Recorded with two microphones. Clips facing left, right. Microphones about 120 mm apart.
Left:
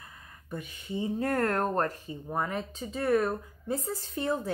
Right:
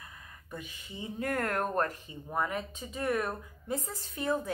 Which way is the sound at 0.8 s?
30° left (ahead or behind).